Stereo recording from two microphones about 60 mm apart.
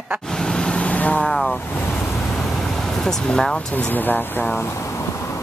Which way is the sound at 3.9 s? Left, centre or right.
Left.